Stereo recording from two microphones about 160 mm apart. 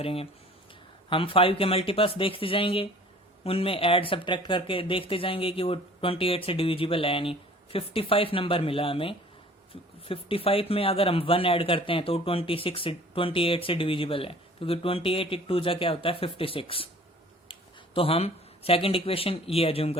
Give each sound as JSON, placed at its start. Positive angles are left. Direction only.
{"t": 0.0, "sound": "speech", "side_deg": 35}